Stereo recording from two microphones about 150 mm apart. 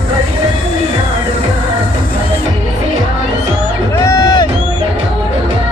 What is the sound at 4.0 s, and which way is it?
Music, 20° left (ahead or behind).